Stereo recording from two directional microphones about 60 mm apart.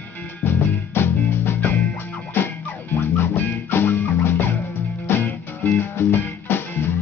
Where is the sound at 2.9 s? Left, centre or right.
Left.